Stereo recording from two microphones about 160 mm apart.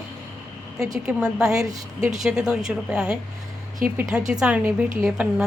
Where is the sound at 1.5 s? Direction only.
20° right (ahead or behind).